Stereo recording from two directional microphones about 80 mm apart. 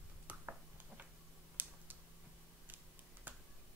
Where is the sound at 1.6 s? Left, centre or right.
Right.